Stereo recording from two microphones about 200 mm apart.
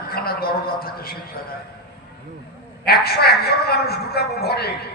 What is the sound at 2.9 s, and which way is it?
A man's voice, 50° left (ahead or behind).